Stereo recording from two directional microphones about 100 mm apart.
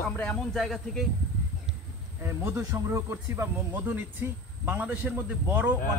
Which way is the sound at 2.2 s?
25° right (ahead or behind).